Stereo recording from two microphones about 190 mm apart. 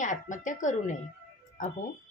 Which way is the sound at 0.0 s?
40° left (ahead or behind).